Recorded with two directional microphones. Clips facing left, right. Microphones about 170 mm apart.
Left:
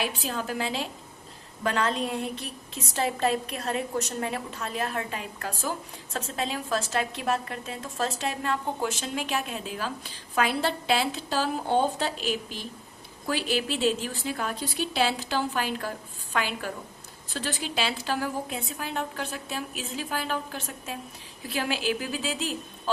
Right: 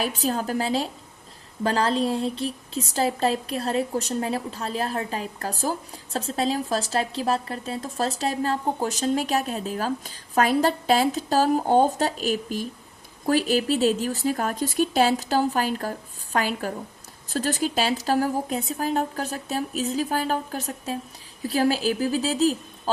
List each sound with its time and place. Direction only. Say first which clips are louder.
0.0 s speech: right 5 dB; 40° right (ahead or behind)